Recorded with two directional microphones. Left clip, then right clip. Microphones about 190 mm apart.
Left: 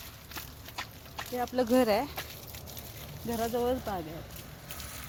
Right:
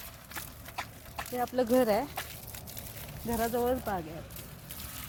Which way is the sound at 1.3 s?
15° left (ahead or behind).